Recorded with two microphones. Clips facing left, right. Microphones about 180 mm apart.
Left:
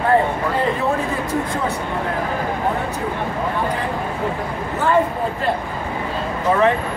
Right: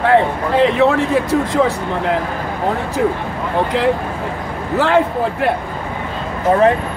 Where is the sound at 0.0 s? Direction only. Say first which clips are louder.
Right 3 dB; 80° right.